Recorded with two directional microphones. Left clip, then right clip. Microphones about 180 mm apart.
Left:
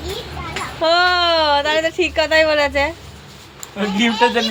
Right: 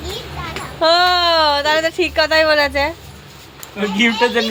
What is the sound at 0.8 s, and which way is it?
A woman's voice, 10° right (ahead or behind).